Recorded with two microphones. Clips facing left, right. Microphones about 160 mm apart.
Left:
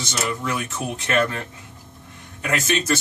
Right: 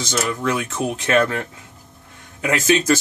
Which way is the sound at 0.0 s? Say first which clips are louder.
Right 4 dB; 90° right.